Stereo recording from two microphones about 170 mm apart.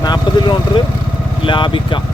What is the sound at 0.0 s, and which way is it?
Speech, 25° left (ahead or behind).